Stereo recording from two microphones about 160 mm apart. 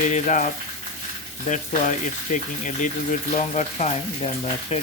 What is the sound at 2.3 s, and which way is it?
Speech, 55° left (ahead or behind).